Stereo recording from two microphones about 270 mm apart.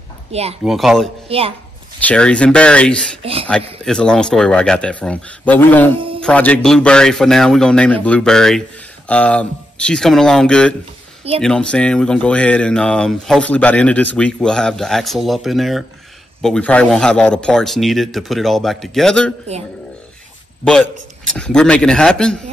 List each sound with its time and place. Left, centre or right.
0.3 s speech: right
0.7 s a man's voice: centre
1.3 s speech: right
2.0 s a man's voice: centre
3.2 s speech: right
3.8 s a man's voice: centre
5.9 s music: centre
6.2 s a man's voice: centre
20.6 s a man's voice: centre